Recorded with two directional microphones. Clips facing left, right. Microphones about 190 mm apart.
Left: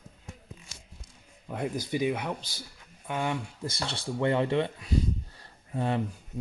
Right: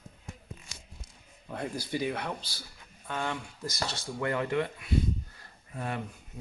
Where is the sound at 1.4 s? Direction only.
15° left (ahead or behind).